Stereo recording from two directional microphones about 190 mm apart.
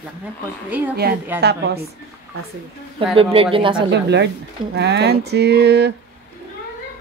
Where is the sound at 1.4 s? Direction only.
60° right (ahead or behind).